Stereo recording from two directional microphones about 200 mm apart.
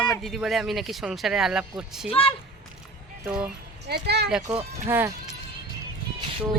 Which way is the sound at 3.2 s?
5° right (ahead or behind).